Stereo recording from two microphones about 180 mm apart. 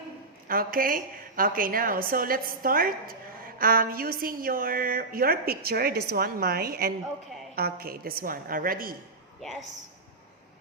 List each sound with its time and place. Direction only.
0.4 s a woman's voice: 55° right (ahead or behind)